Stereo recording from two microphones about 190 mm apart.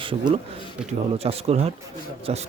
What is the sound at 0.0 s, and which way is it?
Speech, 25° right (ahead or behind).